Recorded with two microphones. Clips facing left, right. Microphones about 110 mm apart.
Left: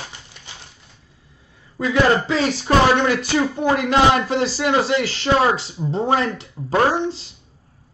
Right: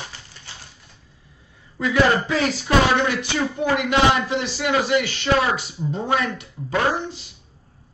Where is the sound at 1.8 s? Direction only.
25° left (ahead or behind).